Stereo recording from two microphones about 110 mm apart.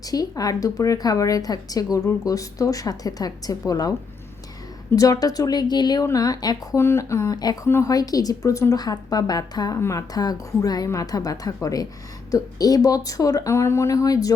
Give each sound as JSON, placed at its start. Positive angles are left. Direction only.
{"t": 0.0, "sound": "a woman's voice", "side_deg": 35}
{"t": 6.7, "sound": "a woman's voice", "side_deg": 25}